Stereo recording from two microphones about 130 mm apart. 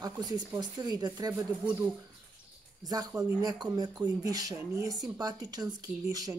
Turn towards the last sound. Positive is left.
turn(degrees=-30)  # may be behind; listen again after turning